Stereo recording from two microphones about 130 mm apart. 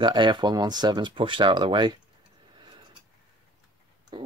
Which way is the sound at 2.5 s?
35° right (ahead or behind).